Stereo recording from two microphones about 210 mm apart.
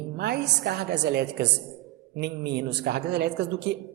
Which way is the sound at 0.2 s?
50° right (ahead or behind).